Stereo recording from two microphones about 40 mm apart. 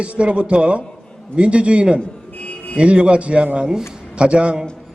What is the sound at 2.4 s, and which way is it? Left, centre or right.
Music, left.